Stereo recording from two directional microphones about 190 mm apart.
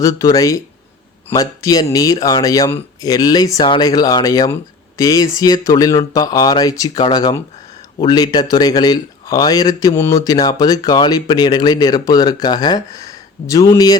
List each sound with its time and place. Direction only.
0.0 s speech: 20° left (ahead or behind)